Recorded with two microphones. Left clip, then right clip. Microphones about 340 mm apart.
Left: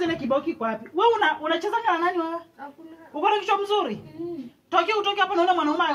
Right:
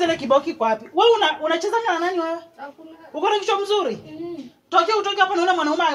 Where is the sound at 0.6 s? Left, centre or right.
Centre.